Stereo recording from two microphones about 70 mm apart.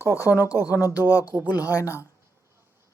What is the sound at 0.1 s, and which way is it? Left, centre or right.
Speech, left.